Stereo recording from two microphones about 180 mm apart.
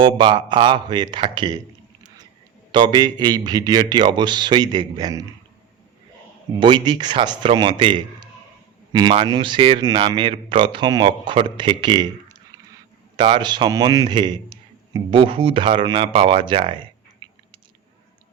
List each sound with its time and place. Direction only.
0.0 s speech: 25° right (ahead or behind)
2.7 s speech: 25° right (ahead or behind)
6.6 s speech: 25° right (ahead or behind)
13.1 s a man's voice: 25° right (ahead or behind)